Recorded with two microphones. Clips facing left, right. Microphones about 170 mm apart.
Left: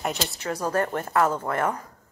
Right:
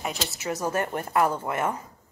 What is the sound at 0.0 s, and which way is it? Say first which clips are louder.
Speech: left 3 dB; centre (ahead or behind).